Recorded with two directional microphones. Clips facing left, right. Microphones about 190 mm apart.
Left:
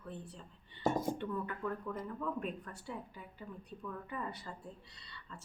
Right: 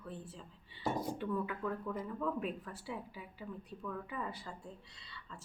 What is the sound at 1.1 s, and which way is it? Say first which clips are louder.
Speech: right 2 dB; 5° right (ahead or behind).